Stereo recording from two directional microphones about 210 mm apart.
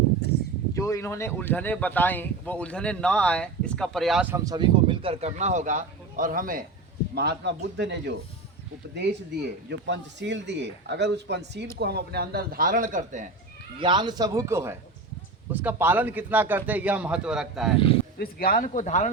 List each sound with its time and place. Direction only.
0.2 s a sound: 50° left (ahead or behind)
0.7 s speech: 15° left (ahead or behind); by 6.7 s 40° right (ahead or behind)
7.2 s speech: 50° right (ahead or behind); by 13.3 s 35° right (ahead or behind)
13.7 s a man's voice: 20° right (ahead or behind); by 17.7 s centre (ahead or behind)
18.2 s speech: 45° left (ahead or behind)